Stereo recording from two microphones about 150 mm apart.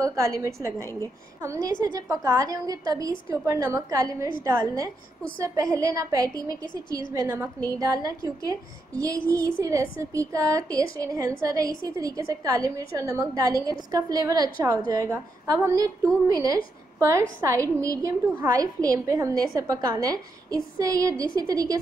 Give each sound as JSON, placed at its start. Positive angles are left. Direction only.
{"t": 0.0, "sound": "a woman's voice", "side_deg": -20}